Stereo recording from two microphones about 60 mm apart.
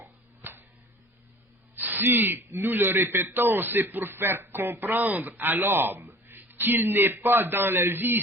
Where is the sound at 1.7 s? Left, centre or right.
Right.